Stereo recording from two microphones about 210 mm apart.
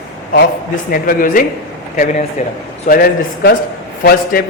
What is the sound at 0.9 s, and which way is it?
Speech, 40° left (ahead or behind).